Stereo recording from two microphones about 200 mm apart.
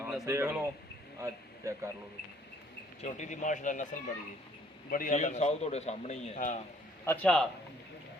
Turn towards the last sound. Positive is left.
turn(degrees=5)  # may be behind; listen again after turning